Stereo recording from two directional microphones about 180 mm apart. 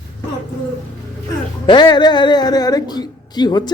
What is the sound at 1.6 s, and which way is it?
A woman's voice, 25° left (ahead or behind).